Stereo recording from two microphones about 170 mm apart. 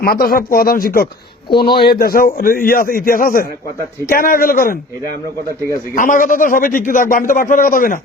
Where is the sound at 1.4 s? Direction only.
30° left (ahead or behind).